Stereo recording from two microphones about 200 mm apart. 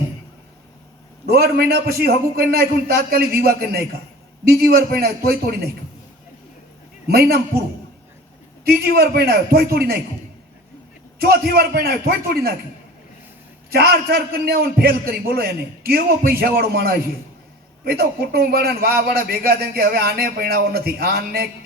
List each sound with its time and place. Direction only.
1.3 s a man's voice: 50° right (ahead or behind)
7.1 s a man's voice: 50° right (ahead or behind)
8.6 s a man's voice: 50° right (ahead or behind)
11.2 s a man's voice: 50° right (ahead or behind)
13.7 s a man's voice: 50° right (ahead or behind)